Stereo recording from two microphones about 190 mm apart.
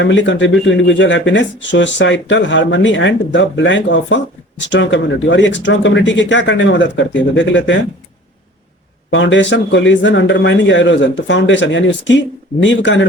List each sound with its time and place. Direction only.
0.0 s speech: 70° left (ahead or behind)
9.0 s speech: 75° left (ahead or behind)